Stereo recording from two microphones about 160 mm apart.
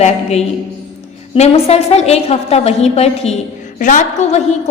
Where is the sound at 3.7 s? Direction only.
55° left (ahead or behind).